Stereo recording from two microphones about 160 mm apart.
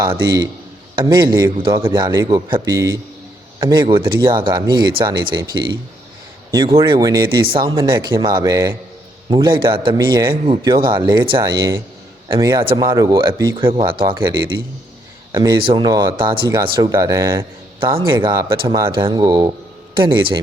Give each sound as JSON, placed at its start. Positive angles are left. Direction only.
{"t": 0.0, "sound": "speech", "side_deg": -25}
{"t": 6.7, "sound": "speech", "side_deg": -25}
{"t": 17.7, "sound": "speech", "side_deg": -35}